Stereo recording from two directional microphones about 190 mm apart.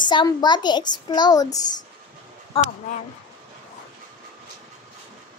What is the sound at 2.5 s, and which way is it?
Speech, 30° left (ahead or behind).